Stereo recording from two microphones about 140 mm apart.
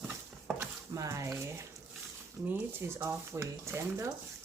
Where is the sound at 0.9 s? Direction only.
20° right (ahead or behind).